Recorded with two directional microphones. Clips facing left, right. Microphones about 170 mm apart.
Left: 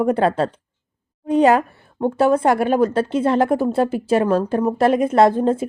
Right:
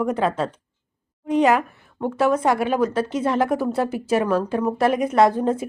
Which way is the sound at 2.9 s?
30° left (ahead or behind).